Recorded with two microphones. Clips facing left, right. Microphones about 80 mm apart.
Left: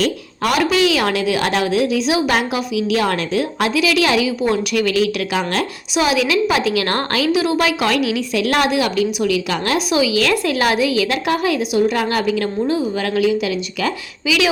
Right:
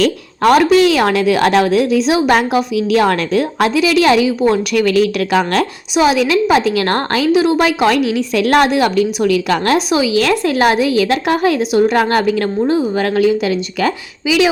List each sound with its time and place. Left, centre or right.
0.4 s a woman's voice: right
5.9 s a woman's voice: right
9.7 s a woman's voice: right
14.3 s speech: right